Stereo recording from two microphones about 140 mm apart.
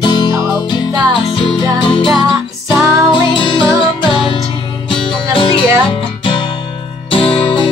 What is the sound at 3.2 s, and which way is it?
Music, 35° left (ahead or behind).